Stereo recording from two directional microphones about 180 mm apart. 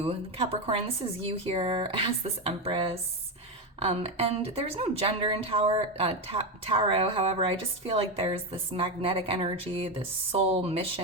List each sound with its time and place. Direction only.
0.0 s speech: 35° right (ahead or behind)